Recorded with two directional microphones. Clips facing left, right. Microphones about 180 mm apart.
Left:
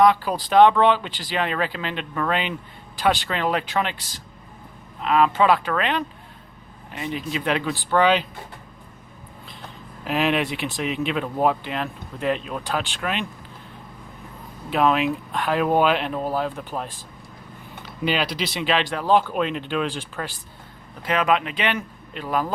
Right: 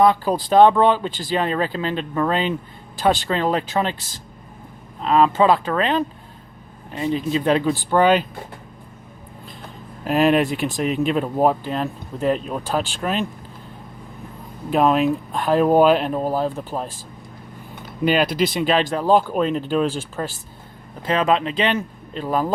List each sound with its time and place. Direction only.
0.3 s speech: 30° right (ahead or behind)
4.9 s speech: 35° right (ahead or behind)
10.0 s speech: 45° right (ahead or behind)
14.7 s speech: 40° right (ahead or behind)
18.0 s speech: 50° right (ahead or behind)
21.1 s speech: 30° right (ahead or behind)